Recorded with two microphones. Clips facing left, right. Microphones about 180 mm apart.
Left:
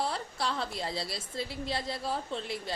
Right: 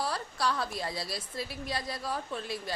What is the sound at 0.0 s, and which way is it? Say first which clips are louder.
A woman's voice: right 1 dB; 25° left (ahead or behind).